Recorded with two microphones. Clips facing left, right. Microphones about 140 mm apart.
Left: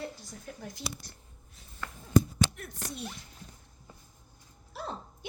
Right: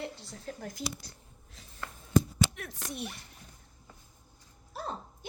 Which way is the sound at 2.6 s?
90° right.